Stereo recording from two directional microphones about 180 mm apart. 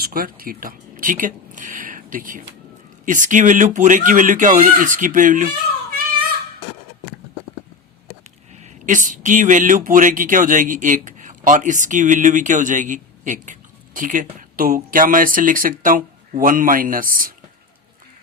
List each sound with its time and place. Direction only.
0.0 s speech: 55° right (ahead or behind)
8.6 s speech: 45° right (ahead or behind)